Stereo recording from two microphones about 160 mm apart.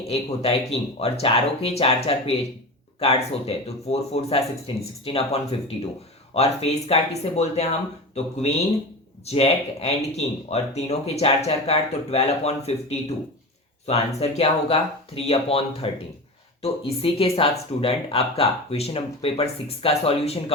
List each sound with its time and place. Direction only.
0.1 s speech: 40° left (ahead or behind)